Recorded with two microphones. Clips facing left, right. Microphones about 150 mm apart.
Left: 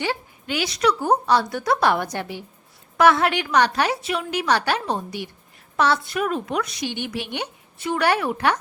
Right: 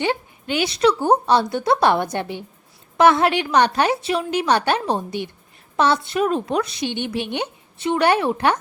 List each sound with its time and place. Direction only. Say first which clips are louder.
0.0 s a woman's voice: right 4 dB; 25° right (ahead or behind)